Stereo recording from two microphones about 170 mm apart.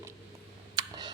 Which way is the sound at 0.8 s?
25° right (ahead or behind).